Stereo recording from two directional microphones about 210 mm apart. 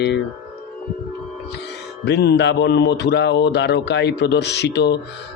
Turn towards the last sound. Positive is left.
turn(degrees=55)  # may be behind; listen again after turning